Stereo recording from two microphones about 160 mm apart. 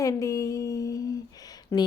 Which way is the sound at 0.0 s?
20° left (ahead or behind).